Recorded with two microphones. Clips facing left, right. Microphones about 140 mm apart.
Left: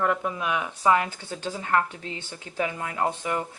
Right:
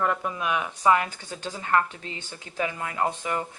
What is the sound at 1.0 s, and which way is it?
Speech, 15° right (ahead or behind).